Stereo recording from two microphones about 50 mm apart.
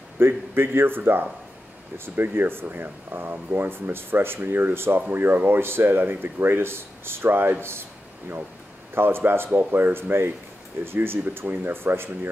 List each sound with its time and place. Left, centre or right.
0.2 s speech: right
8.9 s speech: right